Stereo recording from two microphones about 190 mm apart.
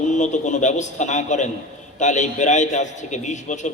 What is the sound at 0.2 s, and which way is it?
A man's voice, 40° left (ahead or behind).